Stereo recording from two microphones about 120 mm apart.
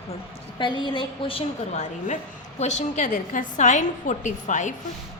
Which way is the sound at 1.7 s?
75° left (ahead or behind).